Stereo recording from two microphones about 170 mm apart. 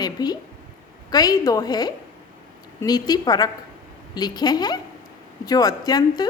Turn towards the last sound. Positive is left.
turn(degrees=20)  # may be behind; listen again after turning